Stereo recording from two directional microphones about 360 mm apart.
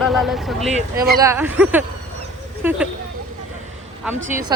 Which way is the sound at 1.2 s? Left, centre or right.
Centre.